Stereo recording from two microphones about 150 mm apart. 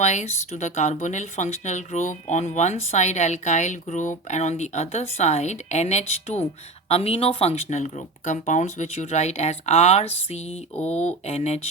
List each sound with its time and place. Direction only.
0.0 s speech: 50° left (ahead or behind)